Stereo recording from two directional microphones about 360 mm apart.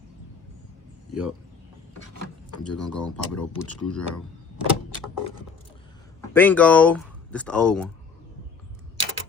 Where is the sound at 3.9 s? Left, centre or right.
Centre.